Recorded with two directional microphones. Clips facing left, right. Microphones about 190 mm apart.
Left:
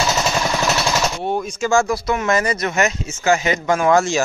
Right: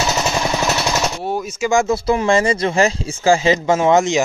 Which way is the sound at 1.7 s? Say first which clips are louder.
Right 1 dB; 20° right (ahead or behind).